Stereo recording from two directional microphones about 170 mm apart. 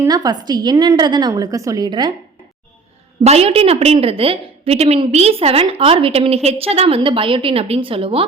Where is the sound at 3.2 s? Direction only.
35° right (ahead or behind).